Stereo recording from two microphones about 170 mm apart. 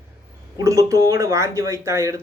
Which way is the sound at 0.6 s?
20° right (ahead or behind).